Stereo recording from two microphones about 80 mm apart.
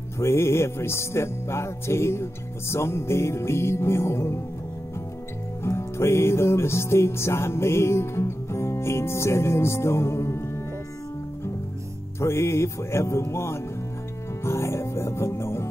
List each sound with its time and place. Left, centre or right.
0.2 s music: left
5.6 s music: left
12.2 s music: left